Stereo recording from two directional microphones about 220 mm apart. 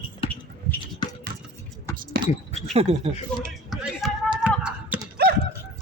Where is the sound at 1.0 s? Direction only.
20° left (ahead or behind).